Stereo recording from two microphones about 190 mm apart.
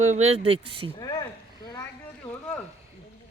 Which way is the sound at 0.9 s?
20° left (ahead or behind).